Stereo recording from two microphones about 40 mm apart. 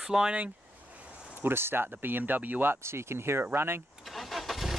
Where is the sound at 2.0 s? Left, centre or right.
Right.